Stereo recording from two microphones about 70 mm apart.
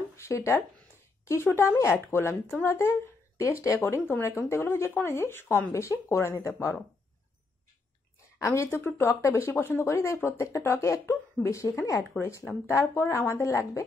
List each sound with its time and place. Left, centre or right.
0.1 s speech: left
5.7 s speech: left
8.4 s a woman's voice: left
8.6 s speech: left